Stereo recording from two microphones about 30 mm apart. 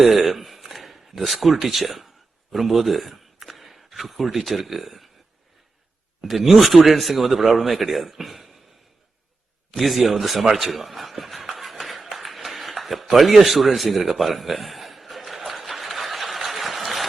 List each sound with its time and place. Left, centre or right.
0.0 s speech: centre
6.2 s speech: centre
9.7 s speech: centre
10.5 s a sound: centre